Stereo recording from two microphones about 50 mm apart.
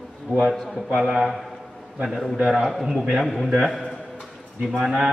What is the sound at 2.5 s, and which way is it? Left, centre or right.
A man's voice, centre.